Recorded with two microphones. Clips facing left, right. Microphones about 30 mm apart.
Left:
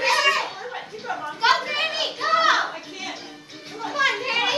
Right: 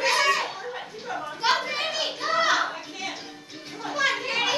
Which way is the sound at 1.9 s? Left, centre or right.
Left.